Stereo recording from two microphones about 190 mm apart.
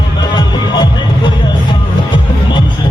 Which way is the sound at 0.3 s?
20° left (ahead or behind).